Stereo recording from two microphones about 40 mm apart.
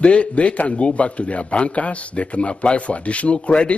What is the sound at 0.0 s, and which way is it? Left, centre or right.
A man's voice, left.